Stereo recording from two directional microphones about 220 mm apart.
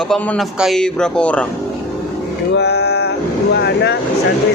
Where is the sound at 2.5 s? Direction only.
50° left (ahead or behind).